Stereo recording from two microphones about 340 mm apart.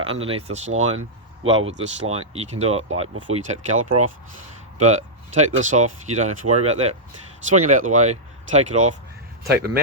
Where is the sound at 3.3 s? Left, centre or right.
Right.